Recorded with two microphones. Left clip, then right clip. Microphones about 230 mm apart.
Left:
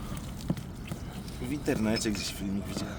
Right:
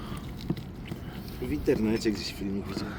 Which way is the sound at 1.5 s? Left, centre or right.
Left.